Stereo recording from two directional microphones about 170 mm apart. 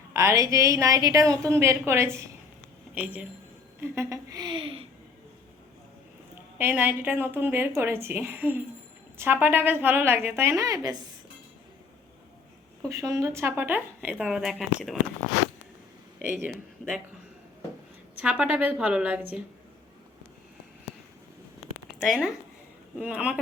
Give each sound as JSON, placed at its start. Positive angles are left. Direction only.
{"t": 0.1, "sound": "a woman's voice", "side_deg": -15}
{"t": 6.6, "sound": "speech", "side_deg": -10}
{"t": 12.9, "sound": "speech", "side_deg": -20}
{"t": 16.2, "sound": "speech", "side_deg": -10}
{"t": 18.2, "sound": "speech", "side_deg": -5}
{"t": 21.9, "sound": "speech", "side_deg": 0}